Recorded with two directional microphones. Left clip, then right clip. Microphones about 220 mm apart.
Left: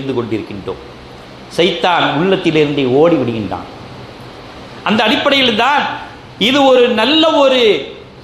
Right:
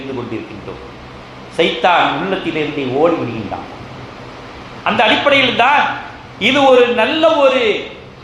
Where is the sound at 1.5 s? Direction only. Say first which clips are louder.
Even; 55° left (ahead or behind).